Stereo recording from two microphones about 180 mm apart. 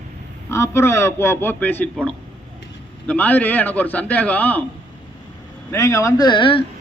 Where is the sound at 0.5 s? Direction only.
15° left (ahead or behind).